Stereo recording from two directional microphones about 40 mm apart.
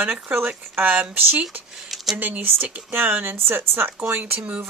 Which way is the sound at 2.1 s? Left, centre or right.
Right.